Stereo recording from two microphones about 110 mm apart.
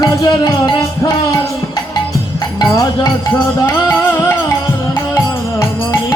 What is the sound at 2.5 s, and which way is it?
Music, 40° left (ahead or behind).